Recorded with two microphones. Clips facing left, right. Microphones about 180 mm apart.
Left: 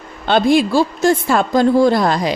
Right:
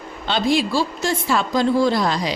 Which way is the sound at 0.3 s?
55° left (ahead or behind).